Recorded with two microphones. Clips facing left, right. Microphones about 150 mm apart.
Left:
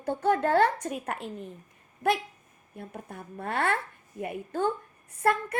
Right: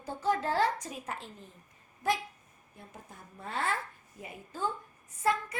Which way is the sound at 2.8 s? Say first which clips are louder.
Left 9 dB; 60° left (ahead or behind).